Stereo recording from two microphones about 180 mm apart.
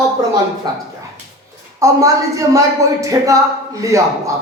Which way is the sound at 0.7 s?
25° right (ahead or behind).